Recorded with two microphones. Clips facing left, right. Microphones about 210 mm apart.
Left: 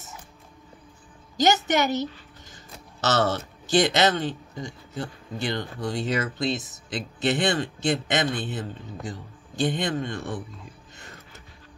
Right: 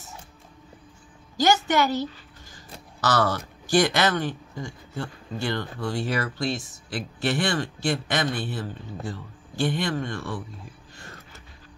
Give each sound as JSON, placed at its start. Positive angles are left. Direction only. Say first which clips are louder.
{"t": 1.3, "sound": "speech", "louder": "even", "side_deg": 20}